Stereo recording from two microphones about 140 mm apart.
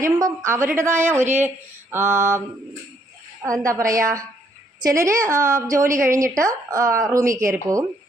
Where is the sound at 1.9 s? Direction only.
15° right (ahead or behind).